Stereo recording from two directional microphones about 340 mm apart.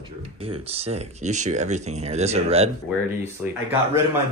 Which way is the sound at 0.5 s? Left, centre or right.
Centre.